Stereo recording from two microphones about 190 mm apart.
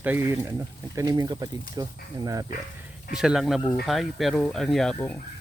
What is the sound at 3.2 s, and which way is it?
Speech, centre (ahead or behind).